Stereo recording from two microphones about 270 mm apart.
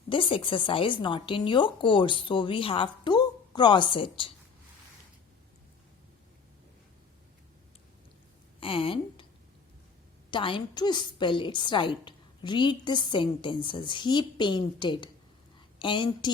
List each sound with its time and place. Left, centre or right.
0.1 s a woman's voice: centre
8.6 s a woman's voice: centre
10.3 s a woman's voice: centre